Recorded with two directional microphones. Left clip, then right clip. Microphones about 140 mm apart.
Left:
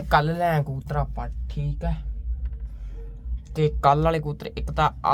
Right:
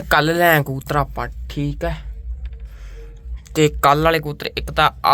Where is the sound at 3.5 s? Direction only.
35° right (ahead or behind).